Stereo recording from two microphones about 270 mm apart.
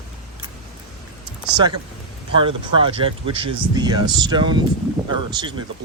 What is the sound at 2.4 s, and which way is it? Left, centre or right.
Speech, centre.